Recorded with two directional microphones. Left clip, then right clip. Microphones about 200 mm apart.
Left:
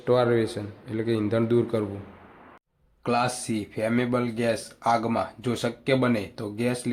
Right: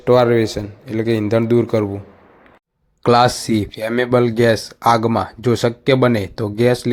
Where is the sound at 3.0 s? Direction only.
35° right (ahead or behind).